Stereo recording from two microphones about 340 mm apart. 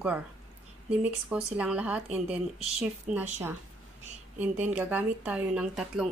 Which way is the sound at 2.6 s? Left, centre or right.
Centre.